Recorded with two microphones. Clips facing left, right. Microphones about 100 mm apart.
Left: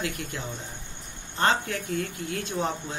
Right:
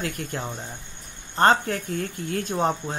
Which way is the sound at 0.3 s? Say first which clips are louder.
Right 4 dB; 45° right (ahead or behind).